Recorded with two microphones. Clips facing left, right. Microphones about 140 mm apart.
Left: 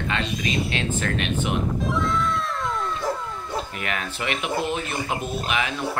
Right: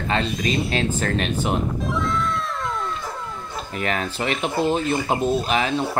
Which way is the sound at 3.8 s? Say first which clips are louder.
Right 5 dB; 35° right (ahead or behind).